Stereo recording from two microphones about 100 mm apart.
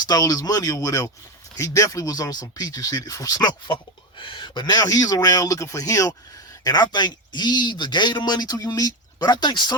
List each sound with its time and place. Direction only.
0.0 s speech: 40° left (ahead or behind)
4.2 s speech: 55° left (ahead or behind)